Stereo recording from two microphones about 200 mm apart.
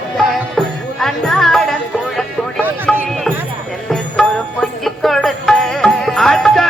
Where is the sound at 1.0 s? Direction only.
Centre (ahead or behind).